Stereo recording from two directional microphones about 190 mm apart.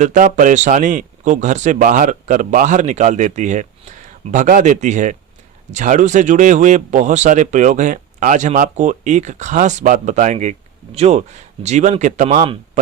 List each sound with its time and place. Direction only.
0.0 s speech: 40° right (ahead or behind)